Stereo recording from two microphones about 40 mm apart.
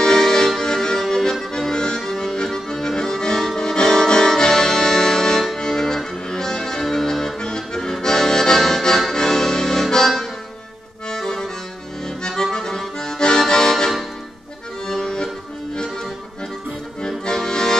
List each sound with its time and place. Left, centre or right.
0.0 s music: centre
1.5 s accordion: centre
17.0 s accordion: centre